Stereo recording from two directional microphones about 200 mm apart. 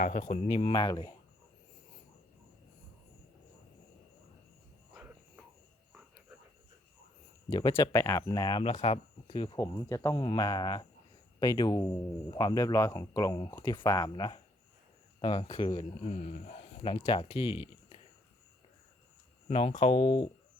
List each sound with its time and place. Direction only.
0.0 s speech: 40° left (ahead or behind); by 1.1 s 20° left (ahead or behind)
4.9 s a sound: 5° right (ahead or behind)
7.5 s speech: 20° left (ahead or behind)
19.5 s speech: 30° left (ahead or behind)